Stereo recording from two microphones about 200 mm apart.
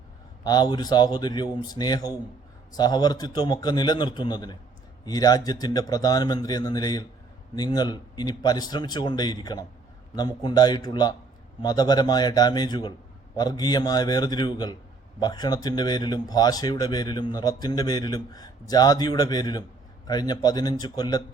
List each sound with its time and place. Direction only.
0.4 s speech: 20° left (ahead or behind)